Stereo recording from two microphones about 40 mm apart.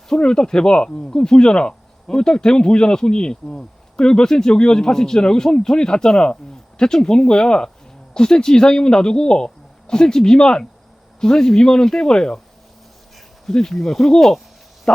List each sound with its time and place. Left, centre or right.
0.2 s speech: centre
13.5 s speech: centre